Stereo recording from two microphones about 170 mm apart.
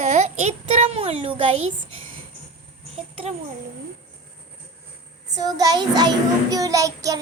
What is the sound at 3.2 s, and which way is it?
Speech, 40° right (ahead or behind).